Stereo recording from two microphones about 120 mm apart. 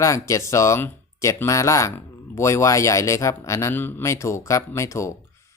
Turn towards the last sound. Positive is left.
turn(degrees=25)  # may be behind; listen again after turning